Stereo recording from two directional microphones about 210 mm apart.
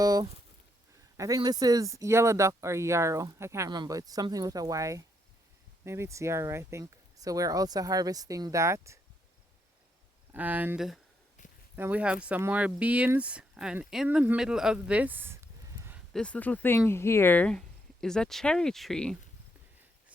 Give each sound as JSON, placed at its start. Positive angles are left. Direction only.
{"t": 0.0, "sound": "a sound", "side_deg": -20}
{"t": 1.1, "sound": "speech", "side_deg": -15}
{"t": 10.3, "sound": "speech", "side_deg": -10}
{"t": 16.1, "sound": "speech", "side_deg": 5}